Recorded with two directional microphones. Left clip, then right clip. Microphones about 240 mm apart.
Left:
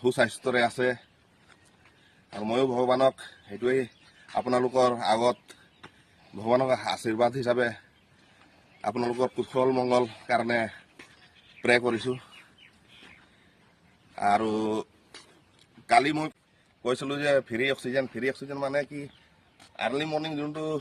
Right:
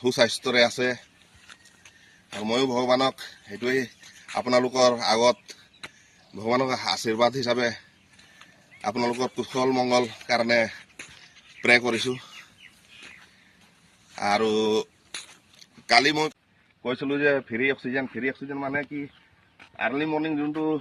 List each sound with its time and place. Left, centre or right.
0.0 s a man's voice: centre
2.8 s a man's voice: centre
4.3 s a man's voice: centre
6.4 s a man's voice: centre
8.8 s a man's voice: centre
14.2 s a man's voice: centre
15.9 s a man's voice: centre